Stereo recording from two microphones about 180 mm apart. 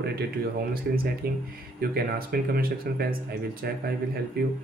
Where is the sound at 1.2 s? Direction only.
60° right (ahead or behind).